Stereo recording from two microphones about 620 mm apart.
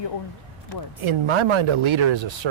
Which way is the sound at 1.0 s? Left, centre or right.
Right.